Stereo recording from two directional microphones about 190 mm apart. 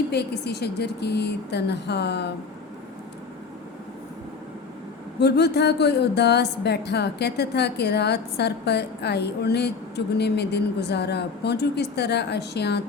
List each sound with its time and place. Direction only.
0.1 s speech: 60° left (ahead or behind)
5.2 s speech: 60° left (ahead or behind)